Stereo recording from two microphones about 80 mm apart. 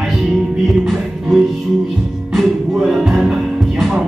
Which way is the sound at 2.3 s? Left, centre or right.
Centre.